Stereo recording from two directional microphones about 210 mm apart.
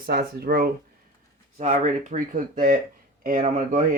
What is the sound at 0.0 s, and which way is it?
Speech, 45° right (ahead or behind).